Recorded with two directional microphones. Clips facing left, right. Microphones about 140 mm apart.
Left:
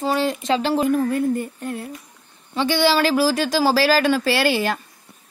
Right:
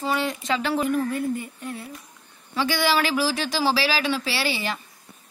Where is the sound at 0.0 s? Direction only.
35° left (ahead or behind).